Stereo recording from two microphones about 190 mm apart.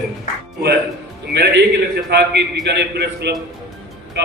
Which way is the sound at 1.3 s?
60° right (ahead or behind).